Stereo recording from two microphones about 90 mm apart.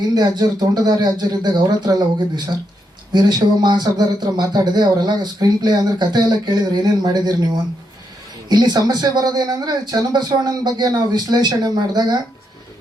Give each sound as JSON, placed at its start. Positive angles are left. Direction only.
{"t": 0.1, "sound": "speech", "side_deg": -50}
{"t": 8.4, "sound": "speech", "side_deg": -50}